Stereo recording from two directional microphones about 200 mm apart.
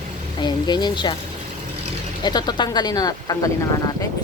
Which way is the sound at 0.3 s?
20° left (ahead or behind).